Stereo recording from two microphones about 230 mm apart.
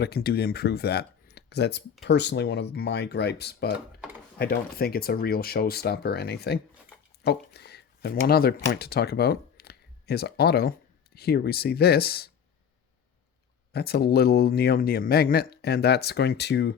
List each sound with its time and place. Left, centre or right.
0.0 s speech: left
13.7 s speech: left